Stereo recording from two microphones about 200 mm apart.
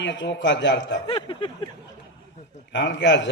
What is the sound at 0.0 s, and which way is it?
A man's voice, 65° left (ahead or behind).